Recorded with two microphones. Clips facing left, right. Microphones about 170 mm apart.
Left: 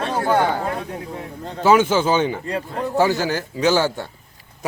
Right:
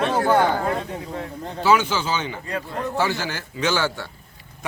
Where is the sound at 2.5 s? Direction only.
40° left (ahead or behind).